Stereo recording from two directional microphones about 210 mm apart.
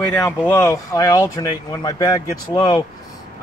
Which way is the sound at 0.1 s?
15° left (ahead or behind).